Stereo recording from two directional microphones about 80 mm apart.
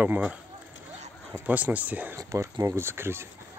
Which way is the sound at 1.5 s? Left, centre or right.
Right.